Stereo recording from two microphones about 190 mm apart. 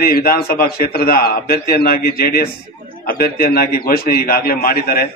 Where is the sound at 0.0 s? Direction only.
55° left (ahead or behind).